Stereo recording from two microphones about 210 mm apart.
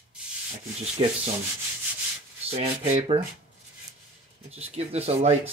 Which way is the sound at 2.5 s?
30° right (ahead or behind).